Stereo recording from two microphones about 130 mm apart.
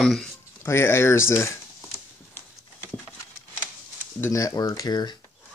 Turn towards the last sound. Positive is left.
turn(degrees=35)  # may be behind; listen again after turning